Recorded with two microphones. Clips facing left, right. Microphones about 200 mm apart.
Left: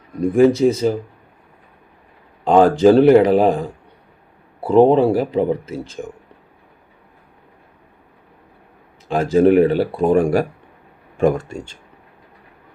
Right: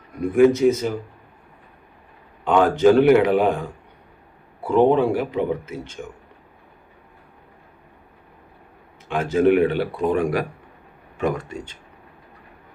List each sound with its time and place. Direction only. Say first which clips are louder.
0.2 s speech: left 2 dB; 35° left (ahead or behind)
2.4 s speech: left 4 dB; 35° left (ahead or behind)
9.0 s speech: left 4 dB; 35° left (ahead or behind)
11.3 s speech: left 6 dB; 30° left (ahead or behind)